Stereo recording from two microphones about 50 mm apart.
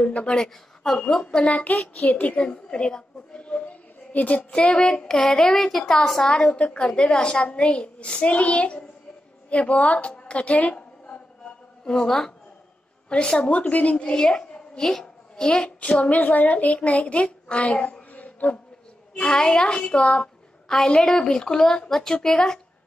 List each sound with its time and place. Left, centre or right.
0.0 s a woman's voice: left
0.4 s a woman's voice: centre
1.0 s a woman's voice: centre
4.5 s a woman's voice: centre
11.8 s a woman's voice: centre
13.1 s a woman's voice: centre
18.1 s insect: left
19.1 s a woman's voice: centre